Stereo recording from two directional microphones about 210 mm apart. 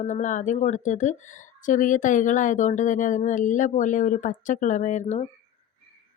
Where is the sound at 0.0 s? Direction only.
35° left (ahead or behind).